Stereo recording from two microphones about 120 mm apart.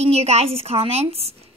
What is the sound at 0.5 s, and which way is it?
Speech, 50° right (ahead or behind).